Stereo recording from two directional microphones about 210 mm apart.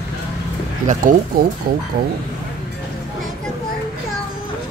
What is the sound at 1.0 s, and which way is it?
Speech, 40° right (ahead or behind).